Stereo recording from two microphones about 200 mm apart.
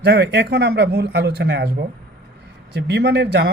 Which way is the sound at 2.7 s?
55° right (ahead or behind).